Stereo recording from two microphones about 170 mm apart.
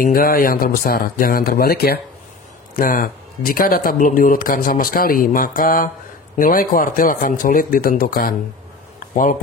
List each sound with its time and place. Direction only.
0.0 s speech: 55° left (ahead or behind)